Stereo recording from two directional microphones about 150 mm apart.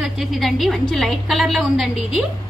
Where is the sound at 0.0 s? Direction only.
Centre (ahead or behind).